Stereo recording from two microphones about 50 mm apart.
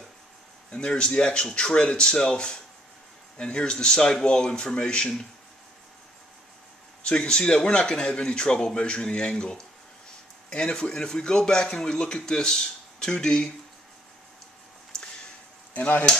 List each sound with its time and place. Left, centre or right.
0.7 s a man's voice: centre
7.1 s a man's voice: centre
14.9 s a sound: centre
15.7 s speech: left